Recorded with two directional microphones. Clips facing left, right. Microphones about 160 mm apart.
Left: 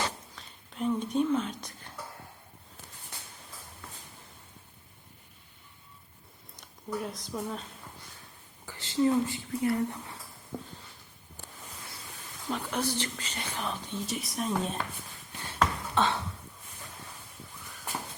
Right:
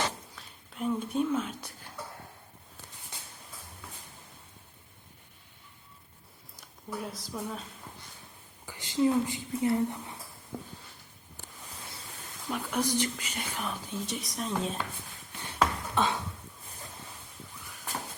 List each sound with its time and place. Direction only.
0.3 s whispering: 5° right (ahead or behind)
6.6 s speech: centre (ahead or behind)
8.6 s a woman's voice: 15° right (ahead or behind)
12.5 s speech: 10° right (ahead or behind)
15.5 s a sound: 10° right (ahead or behind)